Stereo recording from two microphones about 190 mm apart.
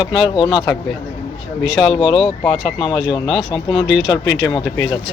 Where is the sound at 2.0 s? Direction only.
25° left (ahead or behind).